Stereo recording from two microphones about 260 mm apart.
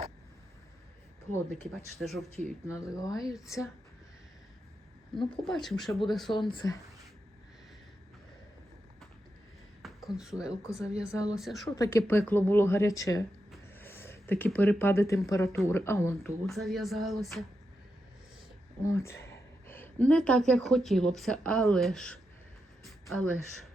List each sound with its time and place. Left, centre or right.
1.3 s speech: centre
2.6 s speech: centre
5.1 s speech: centre
6.3 s speech: centre
9.8 s speech: centre
10.6 s speech: centre
11.3 s speech: centre
11.7 s speech: centre
18.9 s speech: centre
22.9 s a sound: centre